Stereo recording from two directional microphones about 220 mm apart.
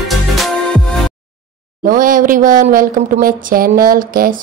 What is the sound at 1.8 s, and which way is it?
Speech, 40° right (ahead or behind).